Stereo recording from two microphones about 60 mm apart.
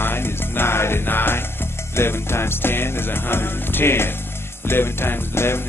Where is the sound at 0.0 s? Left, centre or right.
Left.